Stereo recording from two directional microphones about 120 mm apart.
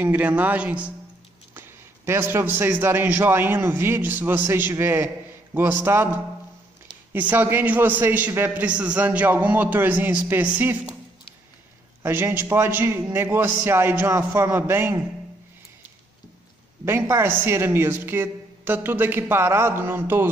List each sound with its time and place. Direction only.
0.0 s a man's voice: 15° right (ahead or behind)
7.1 s a man's voice: 15° right (ahead or behind)
12.0 s a man's voice: 15° right (ahead or behind)
16.8 s a man's voice: 20° right (ahead or behind)